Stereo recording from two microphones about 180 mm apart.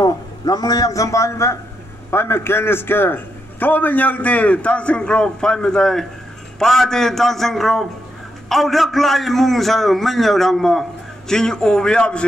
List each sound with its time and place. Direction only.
0.0 s a man's voice: 20° left (ahead or behind); by 12.3 s 5° left (ahead or behind)